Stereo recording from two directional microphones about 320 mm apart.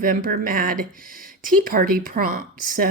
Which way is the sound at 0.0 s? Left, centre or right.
Right.